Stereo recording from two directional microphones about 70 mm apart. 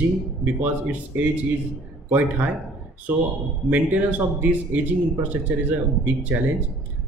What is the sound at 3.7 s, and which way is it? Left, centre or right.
Speech, right.